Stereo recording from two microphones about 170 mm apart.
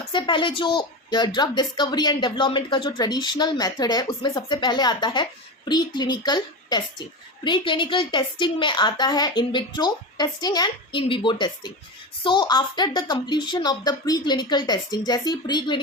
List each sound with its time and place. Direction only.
0.1 s a woman's voice: 30° left (ahead or behind)